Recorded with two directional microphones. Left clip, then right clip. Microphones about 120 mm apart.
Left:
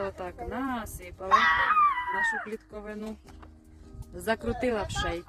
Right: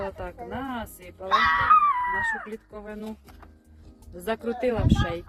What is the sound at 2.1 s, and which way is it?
Speech, 40° left (ahead or behind).